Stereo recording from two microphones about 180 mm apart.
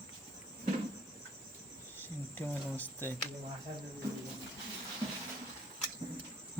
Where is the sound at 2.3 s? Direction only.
10° left (ahead or behind).